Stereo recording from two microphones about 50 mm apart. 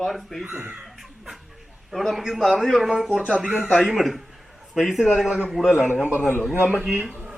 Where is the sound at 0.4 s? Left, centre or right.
Right.